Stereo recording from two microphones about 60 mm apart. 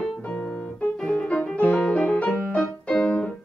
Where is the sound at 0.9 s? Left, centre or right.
Centre.